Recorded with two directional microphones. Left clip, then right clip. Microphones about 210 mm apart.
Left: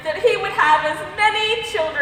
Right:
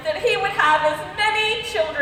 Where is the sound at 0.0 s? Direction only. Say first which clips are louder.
Left 2 dB; 15° left (ahead or behind).